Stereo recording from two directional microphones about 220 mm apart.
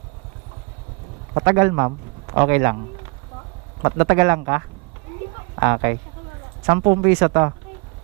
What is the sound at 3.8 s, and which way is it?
A man's voice, 15° right (ahead or behind).